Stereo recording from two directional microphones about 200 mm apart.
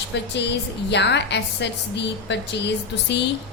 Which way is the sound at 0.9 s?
60° left (ahead or behind).